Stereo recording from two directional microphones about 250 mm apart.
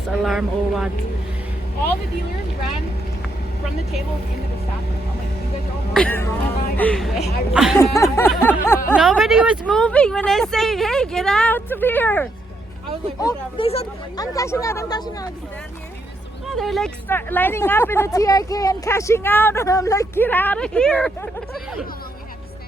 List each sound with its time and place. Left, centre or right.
0.1 s speech: centre
5.9 s speech: centre
7.8 s speech: centre
13.1 s speech: centre
14.3 s speech: centre
16.6 s speech: centre